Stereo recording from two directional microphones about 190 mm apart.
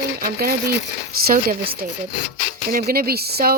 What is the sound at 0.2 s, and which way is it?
Speech, 50° right (ahead or behind).